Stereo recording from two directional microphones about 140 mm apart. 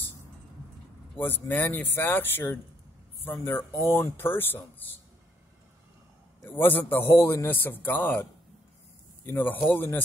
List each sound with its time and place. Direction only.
1.1 s a man's voice: 15° left (ahead or behind)
6.4 s a man's voice: 15° left (ahead or behind)